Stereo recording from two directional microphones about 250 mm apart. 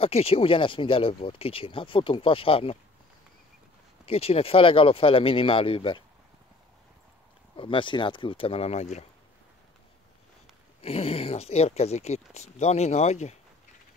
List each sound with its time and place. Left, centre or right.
0.0 s speech: left
4.0 s speech: left
7.5 s speech: centre
10.8 s speech: left